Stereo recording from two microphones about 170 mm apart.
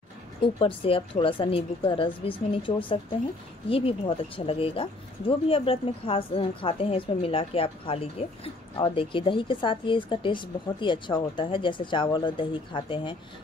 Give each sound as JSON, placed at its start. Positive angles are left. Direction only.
{"t": 0.6, "sound": "a woman's voice", "side_deg": 30}